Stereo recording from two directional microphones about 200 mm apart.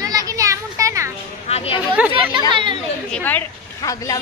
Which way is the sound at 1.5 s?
30° left (ahead or behind).